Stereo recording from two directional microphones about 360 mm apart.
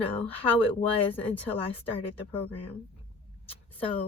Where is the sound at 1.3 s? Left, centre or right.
Centre.